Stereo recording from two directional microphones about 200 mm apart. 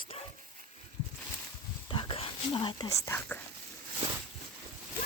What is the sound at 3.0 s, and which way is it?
Speech, 10° left (ahead or behind).